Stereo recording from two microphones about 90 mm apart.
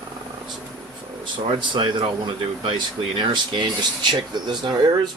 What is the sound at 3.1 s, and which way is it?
Speech, 60° right (ahead or behind).